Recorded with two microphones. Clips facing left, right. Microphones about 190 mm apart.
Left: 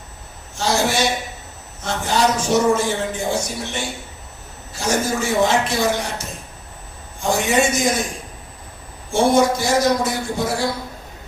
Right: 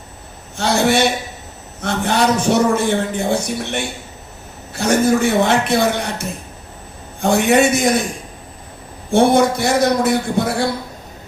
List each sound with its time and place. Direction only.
0.5 s a man's voice: 60° right (ahead or behind)
9.0 s a man's voice: 60° right (ahead or behind)